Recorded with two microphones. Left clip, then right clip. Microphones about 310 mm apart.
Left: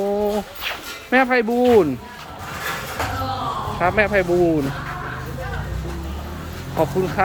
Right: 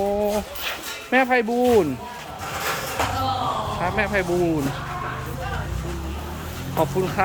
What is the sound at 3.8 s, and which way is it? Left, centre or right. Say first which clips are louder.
Speech: left 7 dB; centre.